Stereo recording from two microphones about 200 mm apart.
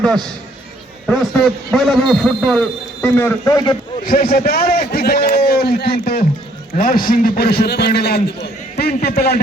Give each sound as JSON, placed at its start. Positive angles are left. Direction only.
{"t": 1.0, "sound": "a man's voice", "side_deg": 0}
{"t": 4.0, "sound": "a man's voice", "side_deg": 45}